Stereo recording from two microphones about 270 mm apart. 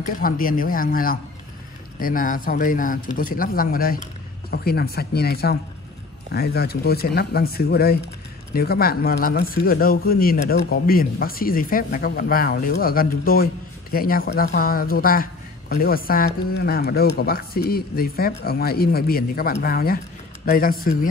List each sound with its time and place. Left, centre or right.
0.0 s speech: left